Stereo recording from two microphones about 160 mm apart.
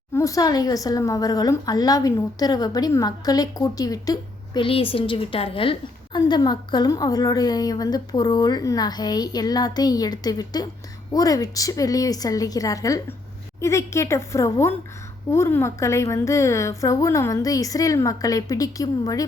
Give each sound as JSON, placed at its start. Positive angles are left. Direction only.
{"t": 0.1, "sound": "a woman's voice", "side_deg": 20}
{"t": 4.6, "sound": "a woman's voice", "side_deg": 35}